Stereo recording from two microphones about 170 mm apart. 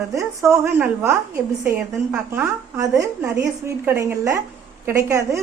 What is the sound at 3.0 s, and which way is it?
A woman's voice, 15° right (ahead or behind).